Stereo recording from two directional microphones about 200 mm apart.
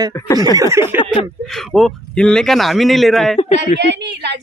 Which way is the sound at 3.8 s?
60° right (ahead or behind).